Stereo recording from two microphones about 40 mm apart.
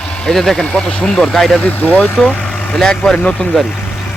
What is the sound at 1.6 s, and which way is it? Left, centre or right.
Speech, left.